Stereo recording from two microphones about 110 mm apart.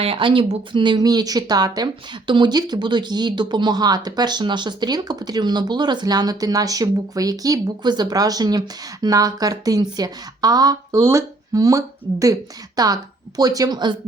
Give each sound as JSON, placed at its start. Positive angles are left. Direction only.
{"t": 0.0, "sound": "speech", "side_deg": -55}